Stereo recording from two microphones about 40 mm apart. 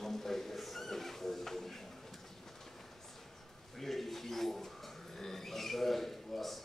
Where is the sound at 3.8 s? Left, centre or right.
Centre.